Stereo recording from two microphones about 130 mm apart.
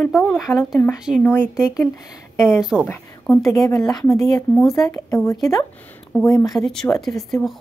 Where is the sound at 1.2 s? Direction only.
15° left (ahead or behind).